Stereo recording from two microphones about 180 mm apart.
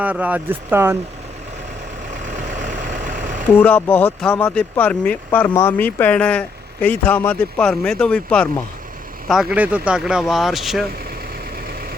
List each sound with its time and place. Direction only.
0.0 s speech: 10° right (ahead or behind)
2.3 s vehicle: 45° right (ahead or behind)
3.6 s speech: 10° left (ahead or behind)